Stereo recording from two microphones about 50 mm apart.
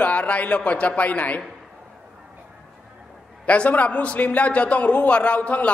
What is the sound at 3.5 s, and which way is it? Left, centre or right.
A man's voice, left.